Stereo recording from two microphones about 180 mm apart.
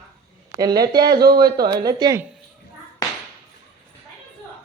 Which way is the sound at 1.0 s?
60° right (ahead or behind).